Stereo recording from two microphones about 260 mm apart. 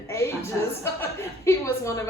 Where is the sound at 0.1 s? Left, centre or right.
Centre.